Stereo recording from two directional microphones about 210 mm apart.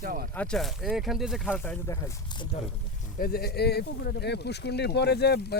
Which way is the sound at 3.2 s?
45° left (ahead or behind).